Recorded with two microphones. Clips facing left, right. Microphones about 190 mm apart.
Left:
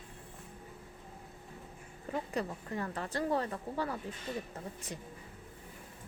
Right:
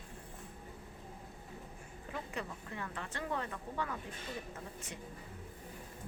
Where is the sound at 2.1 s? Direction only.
40° left (ahead or behind).